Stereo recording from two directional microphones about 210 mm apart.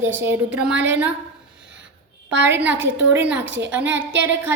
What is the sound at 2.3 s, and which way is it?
Speech, 60° right (ahead or behind).